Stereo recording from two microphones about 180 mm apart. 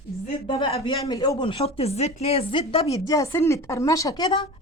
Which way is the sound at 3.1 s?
15° left (ahead or behind).